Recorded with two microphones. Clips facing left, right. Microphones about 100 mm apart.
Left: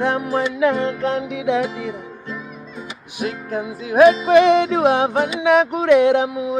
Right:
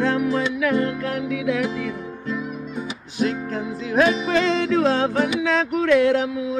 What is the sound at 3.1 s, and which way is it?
Music, 10° left (ahead or behind).